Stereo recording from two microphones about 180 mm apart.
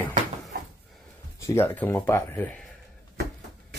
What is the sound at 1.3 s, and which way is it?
Speech, 15° left (ahead or behind).